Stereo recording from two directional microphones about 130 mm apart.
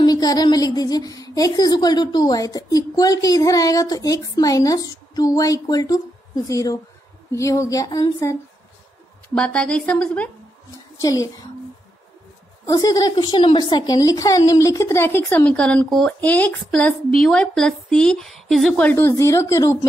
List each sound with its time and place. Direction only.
0.0 s a woman's voice: 30° left (ahead or behind)
9.3 s a woman's voice: 10° left (ahead or behind)
11.0 s a woman's voice: 30° left (ahead or behind)
12.6 s a woman's voice: 30° left (ahead or behind); by 18.9 s centre (ahead or behind)
18.9 s a woman's voice: 20° left (ahead or behind)